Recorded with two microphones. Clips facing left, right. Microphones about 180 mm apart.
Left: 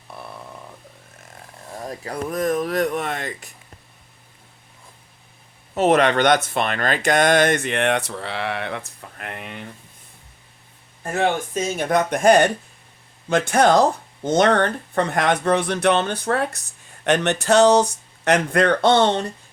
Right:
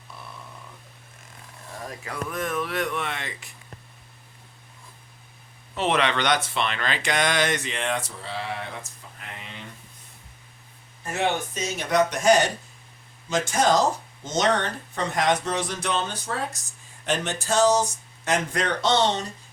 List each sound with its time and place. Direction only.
0.1 s a sound: 60° left (ahead or behind)
1.9 s speech: 35° left (ahead or behind)
5.7 s speech: 45° left (ahead or behind)
11.0 s speech: 50° left (ahead or behind)